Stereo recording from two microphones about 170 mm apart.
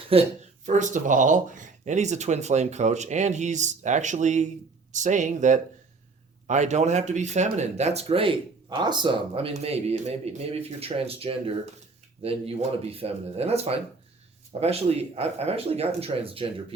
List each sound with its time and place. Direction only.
0.1 s speech: 40° right (ahead or behind)